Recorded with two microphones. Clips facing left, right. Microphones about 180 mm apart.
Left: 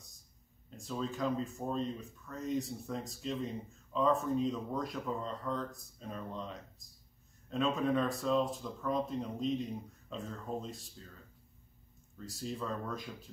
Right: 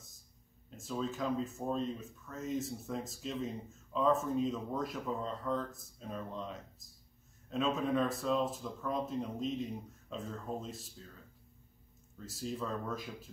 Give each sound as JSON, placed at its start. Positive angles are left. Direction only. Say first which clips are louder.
{"t": 0.7, "sound": "speech", "louder": "right 1 dB", "side_deg": 0}
{"t": 12.2, "sound": "speech", "louder": "right 1 dB", "side_deg": 0}